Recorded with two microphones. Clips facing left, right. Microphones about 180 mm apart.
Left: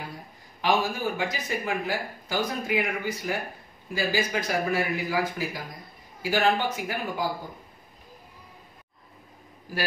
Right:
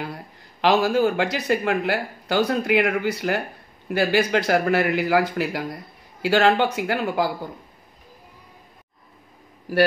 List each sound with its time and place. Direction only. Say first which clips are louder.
0.0 s speech: right 7 dB; 75° right (ahead or behind)